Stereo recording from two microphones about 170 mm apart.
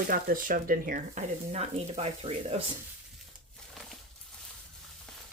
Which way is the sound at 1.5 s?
40° right (ahead or behind).